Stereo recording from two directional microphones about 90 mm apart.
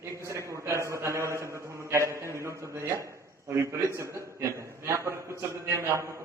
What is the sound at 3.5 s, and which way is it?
A man's voice, 30° right (ahead or behind).